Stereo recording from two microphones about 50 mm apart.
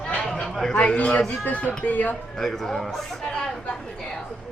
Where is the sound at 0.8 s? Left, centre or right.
Left.